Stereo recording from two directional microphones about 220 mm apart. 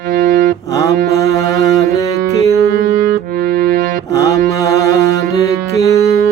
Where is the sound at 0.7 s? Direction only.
15° left (ahead or behind).